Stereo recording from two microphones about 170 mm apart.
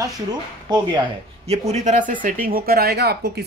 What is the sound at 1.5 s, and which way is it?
Speech, 40° right (ahead or behind).